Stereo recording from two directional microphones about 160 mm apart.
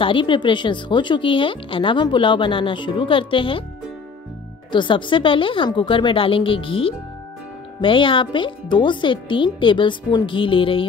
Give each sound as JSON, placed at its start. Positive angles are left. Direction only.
{"t": 0.0, "sound": "a woman's voice", "side_deg": 30}
{"t": 4.7, "sound": "a woman's voice", "side_deg": 30}